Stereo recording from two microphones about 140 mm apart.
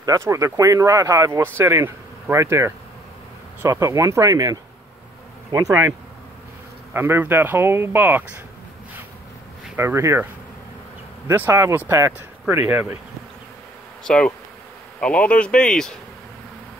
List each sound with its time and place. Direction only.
0.0 s speech: 25° right (ahead or behind)
9.8 s speech: 20° right (ahead or behind)
11.2 s speech: 15° right (ahead or behind)
14.0 s bee: 5° left (ahead or behind)
15.0 s speech: 10° left (ahead or behind)